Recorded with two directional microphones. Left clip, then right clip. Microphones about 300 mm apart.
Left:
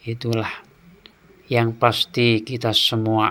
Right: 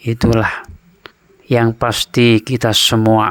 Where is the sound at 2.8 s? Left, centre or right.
Right.